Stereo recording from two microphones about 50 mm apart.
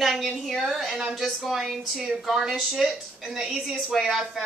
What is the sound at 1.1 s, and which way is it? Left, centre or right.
A woman's voice, centre.